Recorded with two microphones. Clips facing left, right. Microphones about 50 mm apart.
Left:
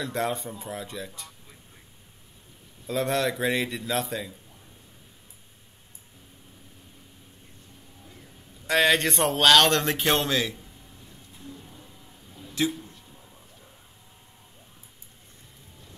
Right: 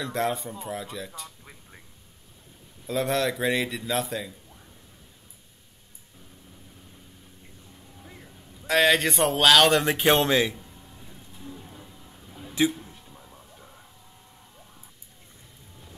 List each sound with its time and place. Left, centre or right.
0.0 s speech: centre
2.9 s speech: centre
8.6 s speech: centre
12.6 s speech: centre